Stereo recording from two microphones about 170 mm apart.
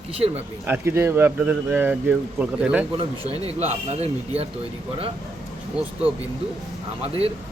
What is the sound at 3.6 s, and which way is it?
Speech, 40° right (ahead or behind).